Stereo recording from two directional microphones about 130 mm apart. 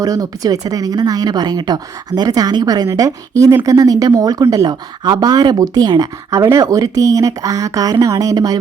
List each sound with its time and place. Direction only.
0.0 s speech: 30° right (ahead or behind)